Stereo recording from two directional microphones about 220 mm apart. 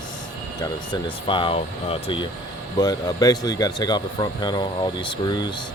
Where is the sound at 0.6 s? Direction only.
20° left (ahead or behind).